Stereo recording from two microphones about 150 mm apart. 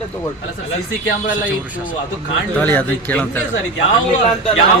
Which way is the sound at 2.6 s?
10° left (ahead or behind).